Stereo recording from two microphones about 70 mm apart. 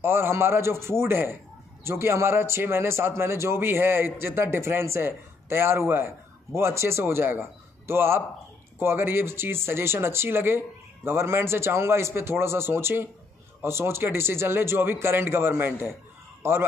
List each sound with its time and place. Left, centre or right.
0.0 s speech: right